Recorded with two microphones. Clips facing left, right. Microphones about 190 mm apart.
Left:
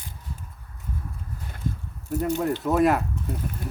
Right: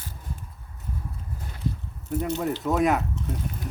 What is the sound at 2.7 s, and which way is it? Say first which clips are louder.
Speech: left 2 dB; centre (ahead or behind).